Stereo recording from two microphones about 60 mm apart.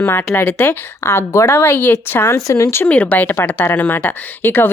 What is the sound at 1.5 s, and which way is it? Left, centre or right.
Speech, left.